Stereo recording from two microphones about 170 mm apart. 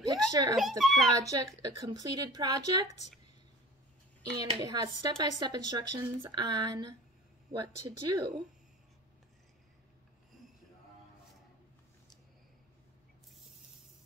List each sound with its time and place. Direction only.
0.0 s a sound: 20° right (ahead or behind)
0.6 s a child's voice: centre (ahead or behind)
1.1 s speech: 20° right (ahead or behind)
4.4 s speech: 25° right (ahead or behind)